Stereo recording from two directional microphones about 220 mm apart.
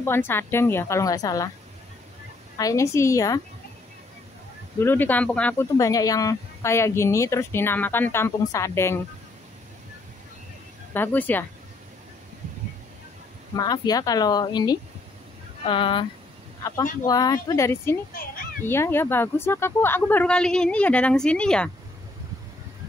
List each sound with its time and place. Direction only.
0.0 s speech: 10° left (ahead or behind)
2.5 s speech: 15° left (ahead or behind)
4.7 s speech: 10° left (ahead or behind)
10.9 s speech: 10° left (ahead or behind)
13.6 s speech: 15° left (ahead or behind)